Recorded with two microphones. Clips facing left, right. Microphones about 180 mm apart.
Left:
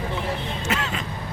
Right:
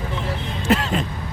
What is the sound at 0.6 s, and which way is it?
Vehicle, 40° right (ahead or behind).